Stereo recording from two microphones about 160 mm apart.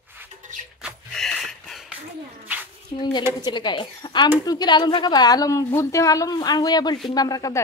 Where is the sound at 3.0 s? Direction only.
30° left (ahead or behind).